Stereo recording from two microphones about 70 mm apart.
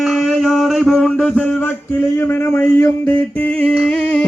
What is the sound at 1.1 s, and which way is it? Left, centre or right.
Speech, centre.